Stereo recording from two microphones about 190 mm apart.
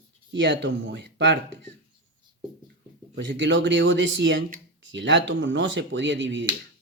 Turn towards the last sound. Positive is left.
turn(degrees=-70)  # may be behind; listen again after turning